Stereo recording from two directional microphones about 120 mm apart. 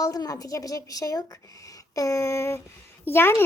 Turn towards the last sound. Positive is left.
turn(degrees=20)  # may be behind; listen again after turning